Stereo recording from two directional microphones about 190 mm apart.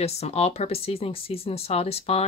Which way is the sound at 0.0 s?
35° left (ahead or behind).